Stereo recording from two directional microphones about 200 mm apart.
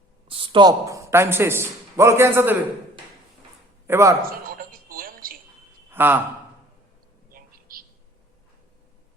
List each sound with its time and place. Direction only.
0.3 s speech: 25° right (ahead or behind); by 2.6 s 10° right (ahead or behind)
3.8 s a man's voice: 15° right (ahead or behind)
4.3 s music: 45° right (ahead or behind)
5.9 s a man's voice: 10° right (ahead or behind)
7.3 s a sound: 45° right (ahead or behind)